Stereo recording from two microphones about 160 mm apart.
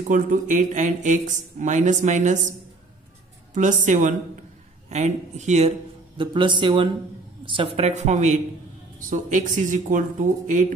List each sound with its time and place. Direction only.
0.1 s speech: 55° right (ahead or behind)
3.5 s speech: 50° right (ahead or behind)
6.1 s a man's voice: 30° right (ahead or behind); by 10.7 s 50° right (ahead or behind)